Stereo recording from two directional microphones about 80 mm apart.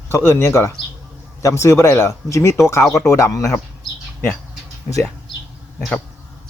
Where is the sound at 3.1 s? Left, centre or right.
Left.